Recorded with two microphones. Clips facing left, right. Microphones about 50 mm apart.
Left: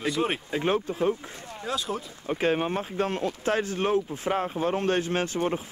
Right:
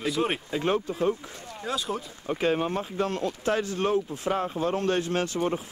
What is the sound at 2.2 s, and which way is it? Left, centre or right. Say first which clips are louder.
Speech: even; centre.